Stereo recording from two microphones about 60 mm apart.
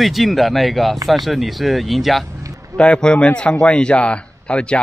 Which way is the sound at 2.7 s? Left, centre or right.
Centre.